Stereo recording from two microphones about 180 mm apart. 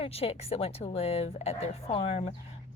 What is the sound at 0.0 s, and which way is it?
A woman's voice, 35° left (ahead or behind).